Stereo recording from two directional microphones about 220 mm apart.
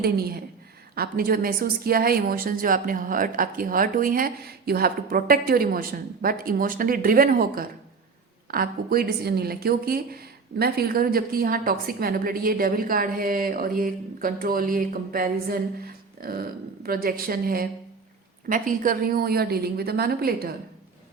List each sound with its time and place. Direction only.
0.0 s a woman's voice: 45° right (ahead or behind)